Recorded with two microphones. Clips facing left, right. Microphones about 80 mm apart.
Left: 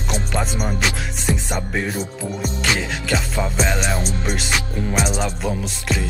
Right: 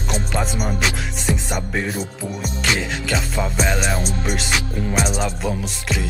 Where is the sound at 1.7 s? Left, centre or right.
Centre.